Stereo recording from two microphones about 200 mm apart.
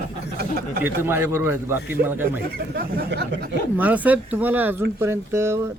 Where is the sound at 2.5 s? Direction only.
50° right (ahead or behind).